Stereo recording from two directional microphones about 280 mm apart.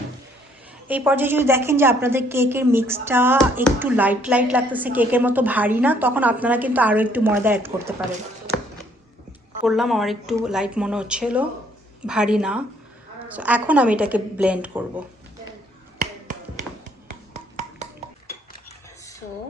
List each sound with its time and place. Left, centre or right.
0.9 s a woman's voice: centre
9.6 s a woman's voice: centre
16.2 s tap: right
17.3 s finger snapping: right